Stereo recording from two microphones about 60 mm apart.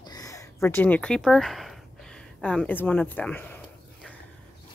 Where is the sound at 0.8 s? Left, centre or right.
Left.